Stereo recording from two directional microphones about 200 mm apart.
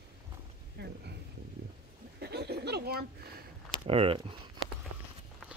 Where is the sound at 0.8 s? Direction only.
55° right (ahead or behind).